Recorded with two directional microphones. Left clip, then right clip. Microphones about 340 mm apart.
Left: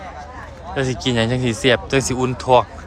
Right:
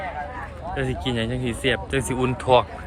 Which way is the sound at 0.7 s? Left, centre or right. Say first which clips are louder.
Left 7 dB; centre.